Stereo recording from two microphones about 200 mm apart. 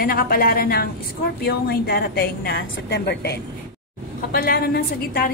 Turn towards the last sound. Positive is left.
turn(degrees=50)  # may be behind; listen again after turning